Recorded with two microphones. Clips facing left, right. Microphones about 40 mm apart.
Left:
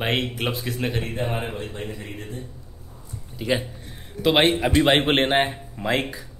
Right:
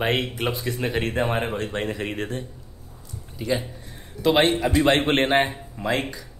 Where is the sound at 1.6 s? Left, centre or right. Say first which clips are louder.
Right 5 dB; right.